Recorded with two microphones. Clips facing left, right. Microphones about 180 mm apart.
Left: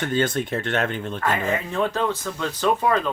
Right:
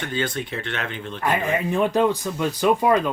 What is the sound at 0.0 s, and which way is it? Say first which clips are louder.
Speech: left 4 dB; 45° left (ahead or behind).